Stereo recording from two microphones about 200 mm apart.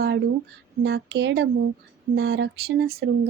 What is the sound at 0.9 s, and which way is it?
Speech, 60° right (ahead or behind).